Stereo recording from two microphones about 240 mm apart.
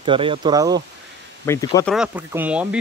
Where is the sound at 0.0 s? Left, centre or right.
Right.